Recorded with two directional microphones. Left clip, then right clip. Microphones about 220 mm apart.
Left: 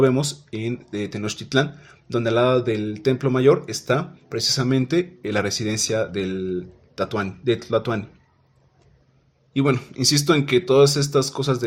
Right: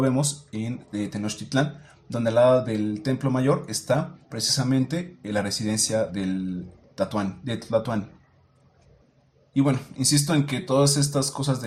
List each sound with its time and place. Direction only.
0.0 s speech: 30° left (ahead or behind)
9.5 s speech: 35° left (ahead or behind)